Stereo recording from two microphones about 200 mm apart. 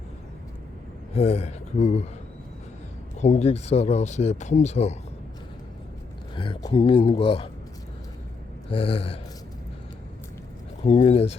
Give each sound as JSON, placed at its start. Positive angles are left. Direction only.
{"t": 1.1, "sound": "speech", "side_deg": 30}
{"t": 3.2, "sound": "speech", "side_deg": 35}
{"t": 6.3, "sound": "speech", "side_deg": 25}
{"t": 8.7, "sound": "speech", "side_deg": 30}
{"t": 10.8, "sound": "speech", "side_deg": 30}